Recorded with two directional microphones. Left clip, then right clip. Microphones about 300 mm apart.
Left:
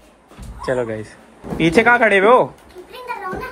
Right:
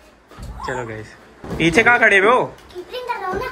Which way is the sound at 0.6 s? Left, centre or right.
Centre.